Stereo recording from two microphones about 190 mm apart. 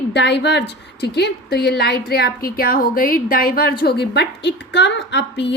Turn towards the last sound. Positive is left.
turn(degrees=70)  # may be behind; listen again after turning